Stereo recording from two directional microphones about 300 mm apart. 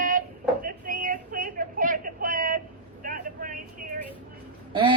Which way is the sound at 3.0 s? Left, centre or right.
Right.